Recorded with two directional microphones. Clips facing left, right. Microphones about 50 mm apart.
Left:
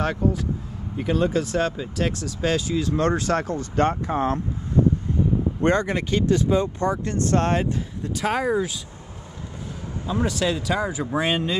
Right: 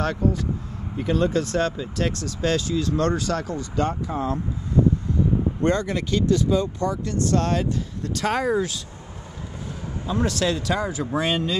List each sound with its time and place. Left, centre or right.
0.0 s speech: centre
3.1 s speech: left
5.6 s speech: left
8.0 s speech: centre
10.0 s speech: centre